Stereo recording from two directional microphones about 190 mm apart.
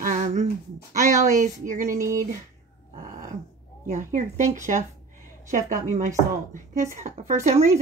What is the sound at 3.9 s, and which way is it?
Speech, 40° right (ahead or behind).